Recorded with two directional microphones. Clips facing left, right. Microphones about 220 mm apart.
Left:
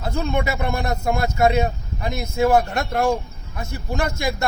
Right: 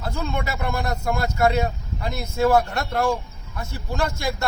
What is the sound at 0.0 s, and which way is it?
Speech, 20° left (ahead or behind).